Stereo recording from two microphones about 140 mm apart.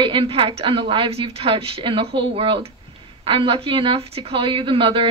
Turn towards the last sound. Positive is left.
turn(degrees=-40)  # may be behind; listen again after turning